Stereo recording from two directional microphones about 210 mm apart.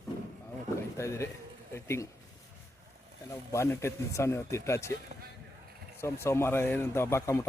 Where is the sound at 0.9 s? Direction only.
15° left (ahead or behind).